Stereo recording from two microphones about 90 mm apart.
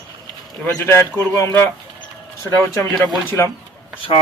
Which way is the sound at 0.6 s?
25° left (ahead or behind).